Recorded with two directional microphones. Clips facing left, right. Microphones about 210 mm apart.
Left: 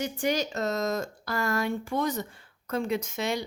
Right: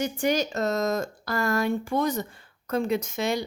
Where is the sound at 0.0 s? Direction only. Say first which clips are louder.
Right 3 dB; 45° right (ahead or behind).